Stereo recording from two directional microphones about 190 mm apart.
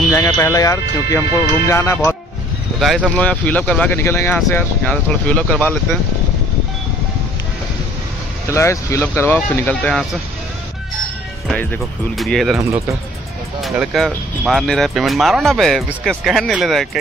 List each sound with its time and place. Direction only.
0.1 s speech: 15° left (ahead or behind)
2.8 s speech: centre (ahead or behind)
8.5 s speech: 15° left (ahead or behind)
11.4 s speech: 5° left (ahead or behind)
12.5 s speech: 15° right (ahead or behind)
13.6 s speech: centre (ahead or behind)